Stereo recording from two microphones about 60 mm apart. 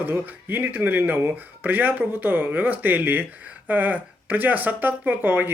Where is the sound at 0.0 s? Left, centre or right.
Right.